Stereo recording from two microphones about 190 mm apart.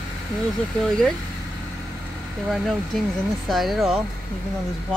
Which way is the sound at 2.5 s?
Centre (ahead or behind).